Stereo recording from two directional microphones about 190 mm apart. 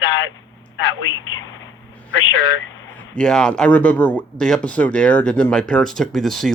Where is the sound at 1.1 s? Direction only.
90° left.